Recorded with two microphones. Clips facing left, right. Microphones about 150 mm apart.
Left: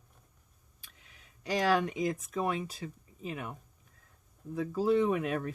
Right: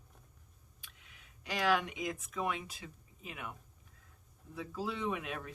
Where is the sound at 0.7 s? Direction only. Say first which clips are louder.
Left 1 dB; 40° left (ahead or behind).